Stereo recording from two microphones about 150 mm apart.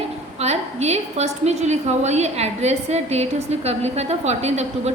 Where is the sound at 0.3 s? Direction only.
45° right (ahead or behind).